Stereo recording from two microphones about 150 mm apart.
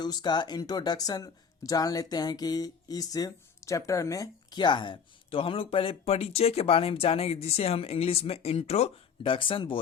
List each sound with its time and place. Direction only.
0.0 s speech: 30° left (ahead or behind)